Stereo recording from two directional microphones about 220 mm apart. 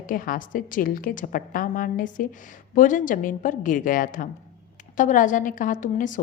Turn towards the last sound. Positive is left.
turn(degrees=35)  # may be behind; listen again after turning